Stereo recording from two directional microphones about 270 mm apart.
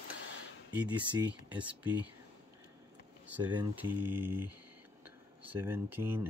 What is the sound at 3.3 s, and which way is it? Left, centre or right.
Speech, centre.